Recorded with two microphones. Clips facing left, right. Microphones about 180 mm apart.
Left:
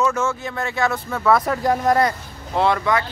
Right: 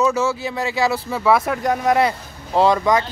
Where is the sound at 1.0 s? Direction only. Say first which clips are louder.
Right 1 dB; 5° right (ahead or behind).